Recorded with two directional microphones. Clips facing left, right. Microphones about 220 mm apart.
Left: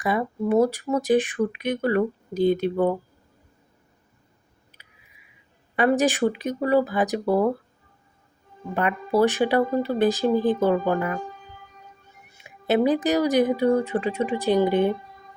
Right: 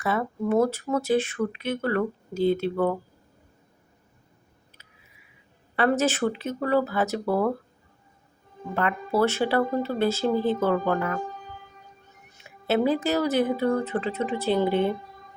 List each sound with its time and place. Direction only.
0.0 s speech: 15° left (ahead or behind)
4.8 s a sound: 15° left (ahead or behind)
5.7 s speech: 15° left (ahead or behind)
8.7 s speech: 15° left (ahead or behind)
12.3 s speech: 15° left (ahead or behind)